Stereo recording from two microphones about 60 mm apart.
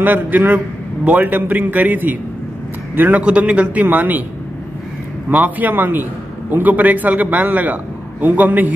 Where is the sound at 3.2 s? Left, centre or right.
Centre.